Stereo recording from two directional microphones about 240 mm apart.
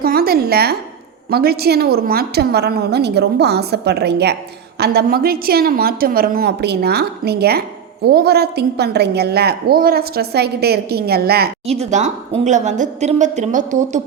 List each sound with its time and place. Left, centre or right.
0.0 s a sound: right
1.3 s a woman's voice: right
11.6 s a woman's voice: right